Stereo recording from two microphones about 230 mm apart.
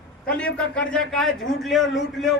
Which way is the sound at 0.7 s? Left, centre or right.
Centre.